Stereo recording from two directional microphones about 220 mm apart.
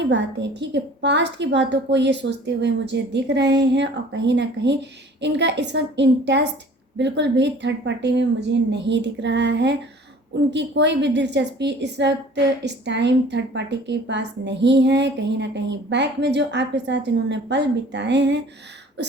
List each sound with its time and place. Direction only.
0.1 s a woman's voice: 55° right (ahead or behind)